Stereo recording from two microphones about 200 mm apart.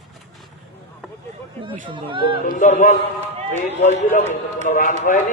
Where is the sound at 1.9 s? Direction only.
25° right (ahead or behind).